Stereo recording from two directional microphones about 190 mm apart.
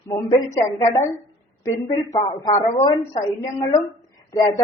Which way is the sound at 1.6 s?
20° left (ahead or behind).